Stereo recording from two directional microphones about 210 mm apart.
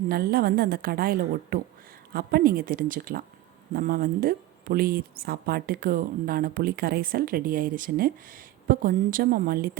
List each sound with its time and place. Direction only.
0.1 s speech: 45° right (ahead or behind)